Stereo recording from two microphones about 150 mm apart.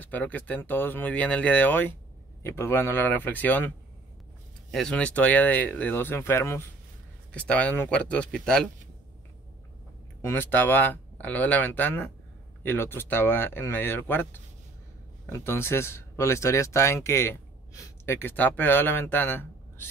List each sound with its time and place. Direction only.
0.0 s speech: 10° left (ahead or behind)
10.2 s speech: 15° left (ahead or behind)